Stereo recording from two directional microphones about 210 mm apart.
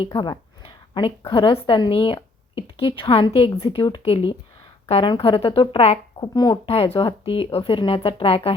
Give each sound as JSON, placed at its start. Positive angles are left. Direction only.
{"t": 0.0, "sound": "speech", "side_deg": 25}